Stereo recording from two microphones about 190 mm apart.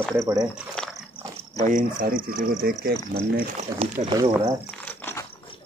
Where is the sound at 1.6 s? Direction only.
45° right (ahead or behind).